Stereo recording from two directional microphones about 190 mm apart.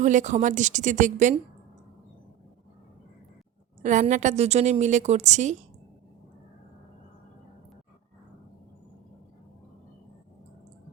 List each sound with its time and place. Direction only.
0.0 s a woman's voice: 40° right (ahead or behind)
3.8 s a woman's voice: 40° right (ahead or behind)